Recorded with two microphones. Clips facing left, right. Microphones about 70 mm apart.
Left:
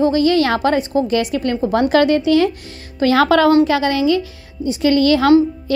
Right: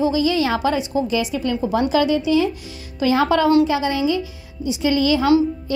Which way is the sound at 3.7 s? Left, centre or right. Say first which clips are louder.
Left 4 dB; left.